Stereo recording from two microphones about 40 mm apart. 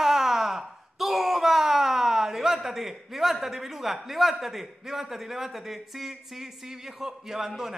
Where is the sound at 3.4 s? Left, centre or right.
Centre.